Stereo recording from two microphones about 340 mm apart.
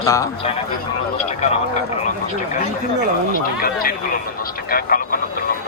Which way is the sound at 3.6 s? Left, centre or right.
Left.